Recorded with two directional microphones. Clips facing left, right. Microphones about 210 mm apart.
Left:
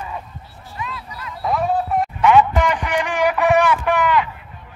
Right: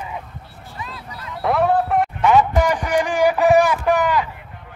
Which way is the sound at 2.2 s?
35° right (ahead or behind).